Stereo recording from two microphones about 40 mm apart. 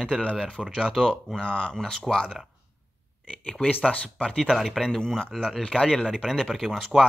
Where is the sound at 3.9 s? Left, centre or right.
Left.